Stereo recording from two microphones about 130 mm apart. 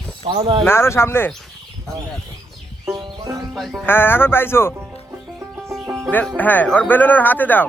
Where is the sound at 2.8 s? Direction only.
35° right (ahead or behind).